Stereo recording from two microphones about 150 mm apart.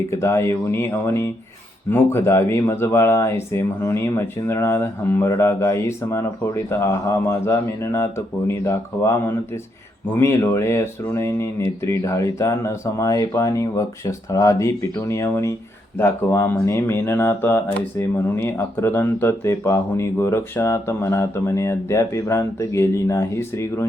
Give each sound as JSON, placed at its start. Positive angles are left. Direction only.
{"t": 0.1, "sound": "speech", "side_deg": 20}